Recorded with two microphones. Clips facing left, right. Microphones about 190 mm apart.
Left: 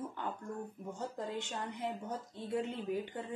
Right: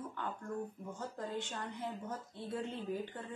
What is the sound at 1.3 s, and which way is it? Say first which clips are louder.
Speech: left 1 dB; 15° left (ahead or behind).